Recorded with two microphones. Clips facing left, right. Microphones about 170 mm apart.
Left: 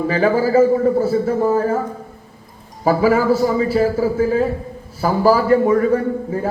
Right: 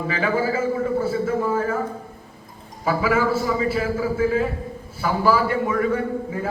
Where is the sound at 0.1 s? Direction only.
40° left (ahead or behind).